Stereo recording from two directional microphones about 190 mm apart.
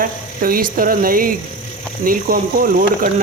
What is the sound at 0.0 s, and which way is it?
Speech, 50° right (ahead or behind).